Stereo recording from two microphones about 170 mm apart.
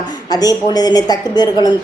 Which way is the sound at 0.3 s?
25° left (ahead or behind).